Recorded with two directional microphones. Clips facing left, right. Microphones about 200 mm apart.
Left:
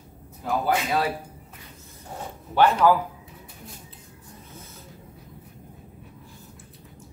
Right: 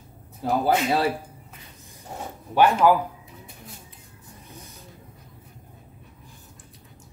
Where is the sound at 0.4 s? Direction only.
30° right (ahead or behind).